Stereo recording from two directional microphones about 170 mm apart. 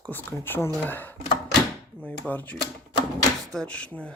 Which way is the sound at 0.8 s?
10° left (ahead or behind).